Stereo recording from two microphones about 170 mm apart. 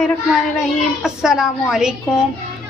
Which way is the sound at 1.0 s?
5° right (ahead or behind).